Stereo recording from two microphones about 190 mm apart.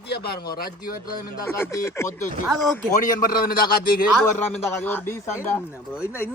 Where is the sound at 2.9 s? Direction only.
45° left (ahead or behind).